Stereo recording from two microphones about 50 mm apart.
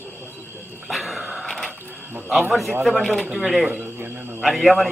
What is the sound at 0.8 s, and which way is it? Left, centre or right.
Dog, centre.